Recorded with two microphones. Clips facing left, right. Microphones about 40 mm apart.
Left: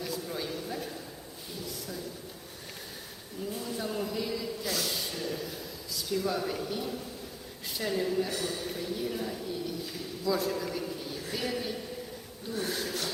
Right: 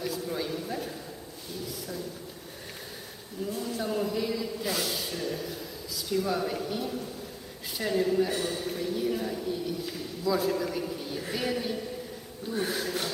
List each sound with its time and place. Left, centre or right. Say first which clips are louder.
0.0 s a sound: right 3 dB; centre
3.5 s a man's voice: right 4 dB; centre
8.3 s speech: right 3 dB; right
8.6 s a man's voice: right 4 dB; centre